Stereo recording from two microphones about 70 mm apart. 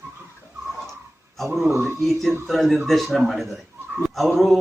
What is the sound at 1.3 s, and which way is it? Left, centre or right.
Speech, centre.